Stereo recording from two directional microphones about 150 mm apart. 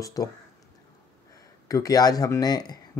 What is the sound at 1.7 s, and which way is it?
Speech, 25° left (ahead or behind).